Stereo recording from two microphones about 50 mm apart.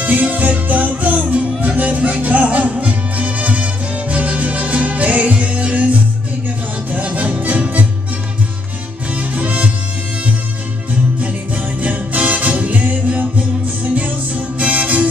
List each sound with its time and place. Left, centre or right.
0.0 s music: right
9.1 s music: right
11.1 s music: right